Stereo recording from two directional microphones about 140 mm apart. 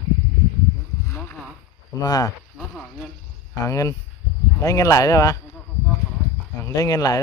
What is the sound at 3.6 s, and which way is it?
Speech, 20° left (ahead or behind).